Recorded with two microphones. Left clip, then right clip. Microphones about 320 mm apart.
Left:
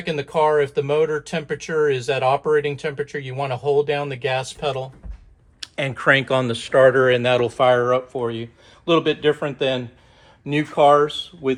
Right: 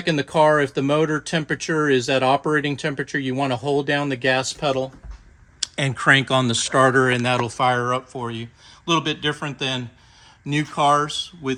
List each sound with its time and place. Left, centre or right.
0.0 s speech: right
5.5 s speech: centre